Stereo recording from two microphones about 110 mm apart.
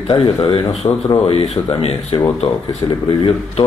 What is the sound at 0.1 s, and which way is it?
Speech, 50° left (ahead or behind).